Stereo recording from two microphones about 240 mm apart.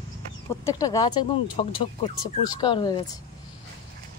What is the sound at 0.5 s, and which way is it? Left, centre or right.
Speech, centre.